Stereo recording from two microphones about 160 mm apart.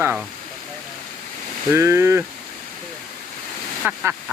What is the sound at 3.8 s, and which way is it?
Speech, 10° right (ahead or behind).